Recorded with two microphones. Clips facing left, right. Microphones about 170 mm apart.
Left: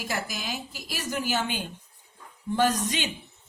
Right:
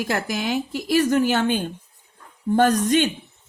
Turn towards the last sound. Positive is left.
turn(degrees=-55)  # may be behind; listen again after turning